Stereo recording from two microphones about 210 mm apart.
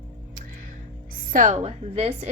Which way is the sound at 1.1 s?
40° right (ahead or behind).